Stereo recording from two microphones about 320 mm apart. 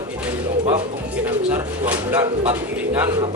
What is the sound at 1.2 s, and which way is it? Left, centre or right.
Bird, centre.